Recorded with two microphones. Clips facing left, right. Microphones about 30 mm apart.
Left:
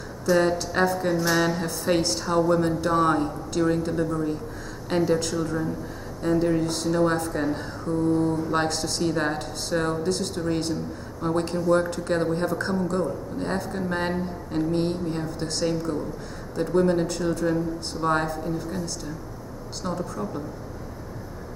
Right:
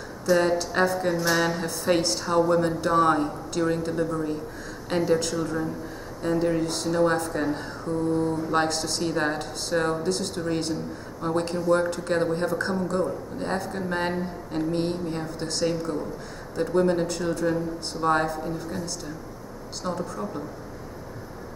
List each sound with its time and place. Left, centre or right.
0.3 s a man's voice: centre